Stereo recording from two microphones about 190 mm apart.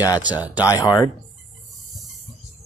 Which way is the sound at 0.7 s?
15° left (ahead or behind).